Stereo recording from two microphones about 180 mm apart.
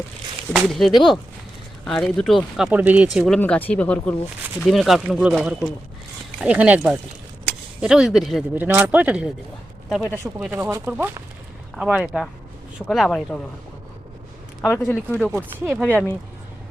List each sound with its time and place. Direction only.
0.5 s speech: centre (ahead or behind)
8.5 s speech: 10° right (ahead or behind)
10.5 s speech: 15° right (ahead or behind); by 13.4 s centre (ahead or behind)
14.6 s a man's voice: 10° left (ahead or behind)
15.3 s speech: 10° right (ahead or behind)
15.8 s speech: centre (ahead or behind)